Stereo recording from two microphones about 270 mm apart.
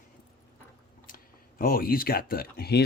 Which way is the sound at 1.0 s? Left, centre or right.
Left.